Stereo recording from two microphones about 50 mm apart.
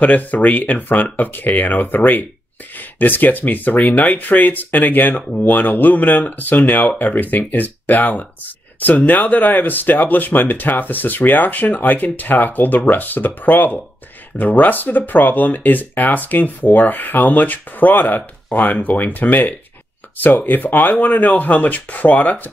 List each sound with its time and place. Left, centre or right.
0.0 s speech: left